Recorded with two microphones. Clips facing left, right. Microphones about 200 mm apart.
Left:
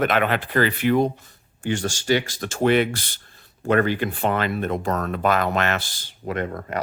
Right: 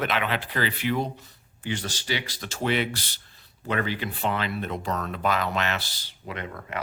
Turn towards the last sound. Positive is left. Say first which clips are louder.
# left 8 dB
turn(degrees=40)  # may be behind; listen again after turning